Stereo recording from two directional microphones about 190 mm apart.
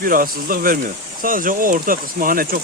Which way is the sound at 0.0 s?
50° right (ahead or behind).